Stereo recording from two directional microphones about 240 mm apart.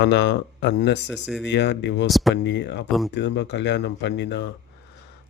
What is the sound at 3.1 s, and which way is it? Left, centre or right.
A man's voice, left.